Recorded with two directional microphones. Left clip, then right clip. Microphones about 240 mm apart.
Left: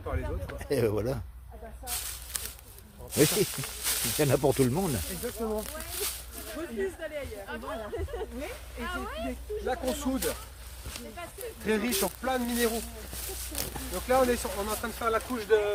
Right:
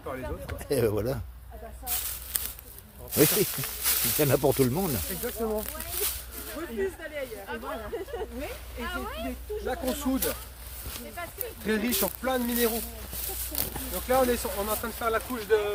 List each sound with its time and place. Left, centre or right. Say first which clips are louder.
0.6 s speech: right 2 dB; centre
1.8 s snake: right 1 dB; centre
3.1 s speech: right 1 dB; centre
4.2 s speech: right 1 dB; centre
5.2 s speech: right 3 dB; centre
11.6 s speech: even; centre